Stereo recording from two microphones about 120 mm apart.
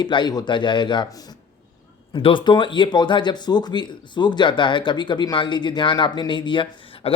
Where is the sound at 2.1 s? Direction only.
40° left (ahead or behind).